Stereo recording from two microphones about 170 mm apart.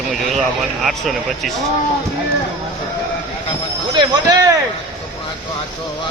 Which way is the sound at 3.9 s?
20° right (ahead or behind).